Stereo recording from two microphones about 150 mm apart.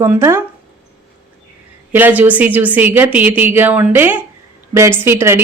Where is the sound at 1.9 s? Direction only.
10° right (ahead or behind).